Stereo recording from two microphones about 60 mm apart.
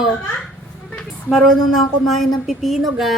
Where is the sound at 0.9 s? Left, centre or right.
Centre.